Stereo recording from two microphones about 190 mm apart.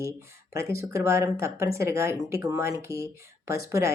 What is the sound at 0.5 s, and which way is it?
A woman's voice, 15° right (ahead or behind).